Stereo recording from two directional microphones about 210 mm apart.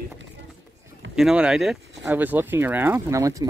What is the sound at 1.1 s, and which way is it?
Speech, 5° right (ahead or behind).